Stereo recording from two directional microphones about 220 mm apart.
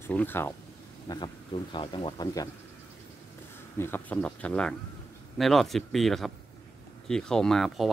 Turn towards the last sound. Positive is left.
turn(degrees=0)  # may be behind; listen again after turning